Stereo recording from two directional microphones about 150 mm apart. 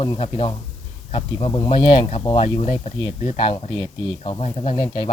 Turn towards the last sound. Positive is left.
turn(degrees=30)  # may be behind; listen again after turning